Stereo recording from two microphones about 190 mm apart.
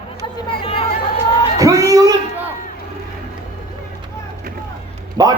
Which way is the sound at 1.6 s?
15° right (ahead or behind).